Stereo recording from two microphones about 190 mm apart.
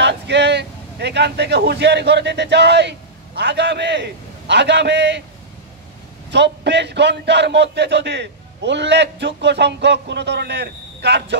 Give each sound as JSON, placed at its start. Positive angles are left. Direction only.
{"t": 0.0, "sound": "speech", "side_deg": -65}
{"t": 6.3, "sound": "a man's voice", "side_deg": -65}